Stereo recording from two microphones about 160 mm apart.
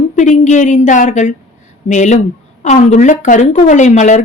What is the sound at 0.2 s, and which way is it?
A woman's voice, 50° left (ahead or behind).